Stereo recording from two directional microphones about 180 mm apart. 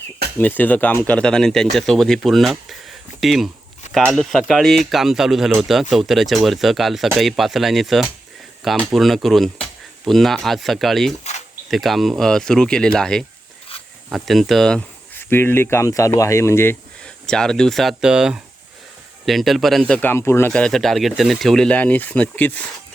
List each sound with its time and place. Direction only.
0.3 s speech: 10° left (ahead or behind)
11.2 s a sound: 40° left (ahead or behind)
11.7 s speech: centre (ahead or behind)
17.2 s speech: 5° left (ahead or behind)
19.9 s speech: 10° left (ahead or behind)